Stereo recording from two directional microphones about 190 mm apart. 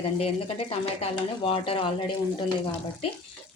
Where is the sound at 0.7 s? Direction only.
30° left (ahead or behind).